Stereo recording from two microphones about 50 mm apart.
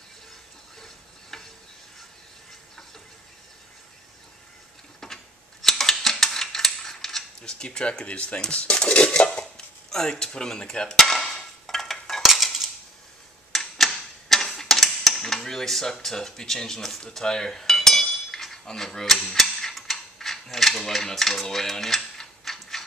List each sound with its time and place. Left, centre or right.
0.7 s stir: centre
5.0 s mechanisms: centre; by 8.4 s left
8.5 s dishes: left
9.8 s hammer: centre
13.5 s typewriter: centre